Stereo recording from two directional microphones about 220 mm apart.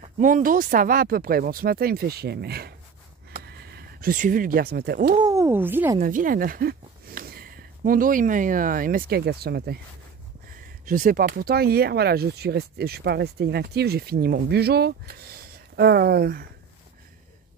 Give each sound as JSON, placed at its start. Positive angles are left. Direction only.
{"t": 0.0, "sound": "speech", "side_deg": -35}
{"t": 3.3, "sound": "a sound", "side_deg": -45}
{"t": 5.2, "sound": "speech", "side_deg": -15}
{"t": 5.9, "sound": "speech", "side_deg": -40}
{"t": 10.9, "sound": "speech", "side_deg": -40}